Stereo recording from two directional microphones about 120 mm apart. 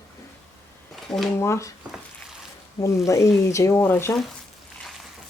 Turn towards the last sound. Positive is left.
turn(degrees=20)  # may be behind; listen again after turning